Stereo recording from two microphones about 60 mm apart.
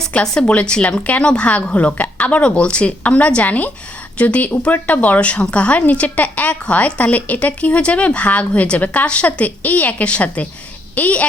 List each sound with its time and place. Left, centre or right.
0.1 s a woman's voice: centre